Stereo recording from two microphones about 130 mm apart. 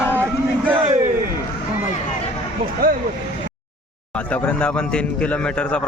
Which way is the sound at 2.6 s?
90° right.